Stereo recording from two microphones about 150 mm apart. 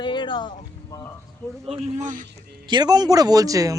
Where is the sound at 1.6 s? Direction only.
45° right (ahead or behind).